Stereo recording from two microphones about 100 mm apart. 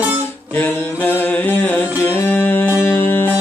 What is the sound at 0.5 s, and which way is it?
Mantra, 20° left (ahead or behind).